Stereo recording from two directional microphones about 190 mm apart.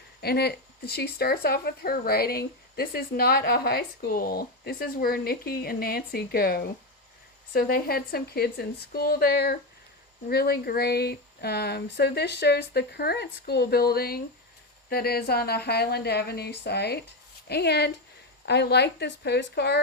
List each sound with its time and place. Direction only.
0.2 s speech: 55° left (ahead or behind)